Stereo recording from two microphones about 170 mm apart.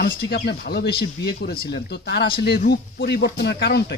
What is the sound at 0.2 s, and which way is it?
Speech, 70° left (ahead or behind).